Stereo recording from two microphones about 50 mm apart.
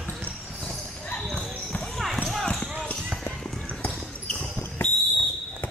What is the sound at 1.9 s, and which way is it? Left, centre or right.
Basketball bounce, centre.